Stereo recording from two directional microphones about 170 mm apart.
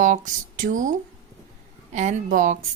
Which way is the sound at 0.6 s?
50° right (ahead or behind).